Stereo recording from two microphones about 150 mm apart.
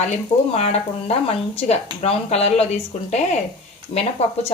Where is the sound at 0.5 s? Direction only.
40° left (ahead or behind).